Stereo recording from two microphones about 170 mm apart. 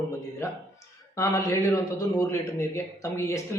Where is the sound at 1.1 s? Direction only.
15° left (ahead or behind).